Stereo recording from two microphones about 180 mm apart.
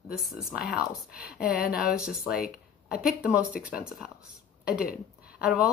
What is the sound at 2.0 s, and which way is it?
Speech, 5° right (ahead or behind).